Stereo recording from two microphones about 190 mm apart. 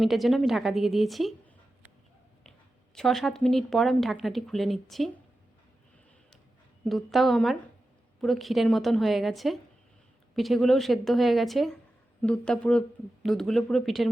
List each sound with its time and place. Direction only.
0.0 s a woman's voice: centre (ahead or behind)
2.4 s speech: centre (ahead or behind)
6.8 s a woman's voice: centre (ahead or behind)